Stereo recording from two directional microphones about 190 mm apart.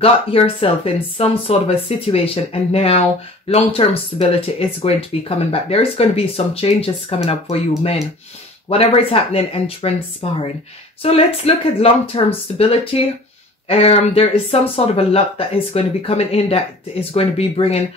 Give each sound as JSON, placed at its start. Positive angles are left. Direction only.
{"t": 0.0, "sound": "speech", "side_deg": 30}